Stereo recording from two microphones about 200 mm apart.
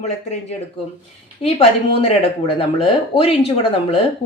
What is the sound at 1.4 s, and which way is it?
Speech, 30° left (ahead or behind).